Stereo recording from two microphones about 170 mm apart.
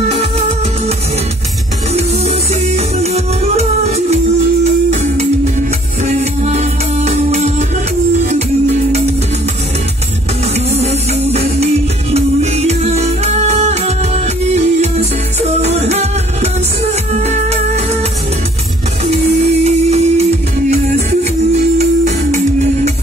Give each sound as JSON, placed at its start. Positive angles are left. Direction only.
{"t": 0.1, "sound": "music", "side_deg": -40}
{"t": 2.0, "sound": "music", "side_deg": -40}
{"t": 6.0, "sound": "music", "side_deg": -40}
{"t": 10.8, "sound": "music", "side_deg": -40}
{"t": 17.3, "sound": "music", "side_deg": -40}
{"t": 19.6, "sound": "music", "side_deg": -40}
{"t": 21.7, "sound": "music", "side_deg": -45}